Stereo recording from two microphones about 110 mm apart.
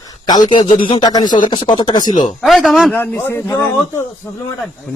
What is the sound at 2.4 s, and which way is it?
Speech, centre (ahead or behind).